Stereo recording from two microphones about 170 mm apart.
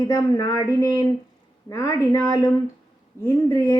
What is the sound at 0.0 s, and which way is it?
Speech, 20° left (ahead or behind).